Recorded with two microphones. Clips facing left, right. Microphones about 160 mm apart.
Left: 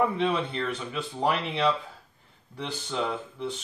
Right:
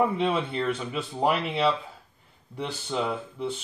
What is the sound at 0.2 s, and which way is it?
Speech, 5° right (ahead or behind).